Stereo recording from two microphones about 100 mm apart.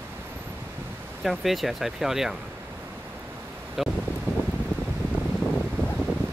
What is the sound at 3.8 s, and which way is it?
Speech, 5° right (ahead or behind).